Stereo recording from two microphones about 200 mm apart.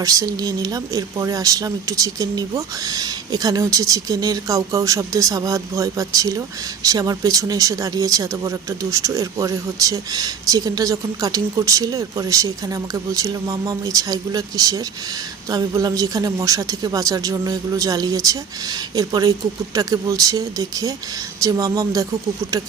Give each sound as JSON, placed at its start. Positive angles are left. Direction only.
{"t": 0.0, "sound": "speech", "side_deg": -15}